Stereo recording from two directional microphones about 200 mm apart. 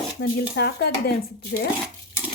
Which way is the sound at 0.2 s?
55° left (ahead or behind).